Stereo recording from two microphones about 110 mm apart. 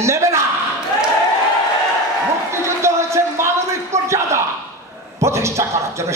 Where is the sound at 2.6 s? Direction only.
25° right (ahead or behind).